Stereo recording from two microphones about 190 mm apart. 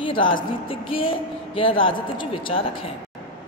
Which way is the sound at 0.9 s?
30° left (ahead or behind).